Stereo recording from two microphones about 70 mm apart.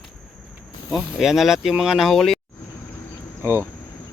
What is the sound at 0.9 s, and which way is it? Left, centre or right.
Speech, centre.